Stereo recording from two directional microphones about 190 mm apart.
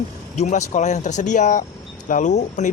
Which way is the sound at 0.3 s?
40° left (ahead or behind).